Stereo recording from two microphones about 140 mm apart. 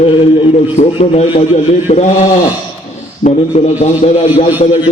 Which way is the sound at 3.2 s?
55° left (ahead or behind).